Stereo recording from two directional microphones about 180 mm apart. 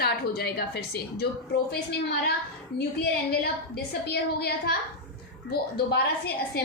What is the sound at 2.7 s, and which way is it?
A woman's voice, 65° left (ahead or behind).